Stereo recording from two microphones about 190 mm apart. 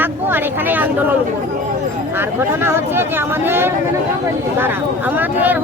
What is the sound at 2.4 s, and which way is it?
Speech, 10° right (ahead or behind).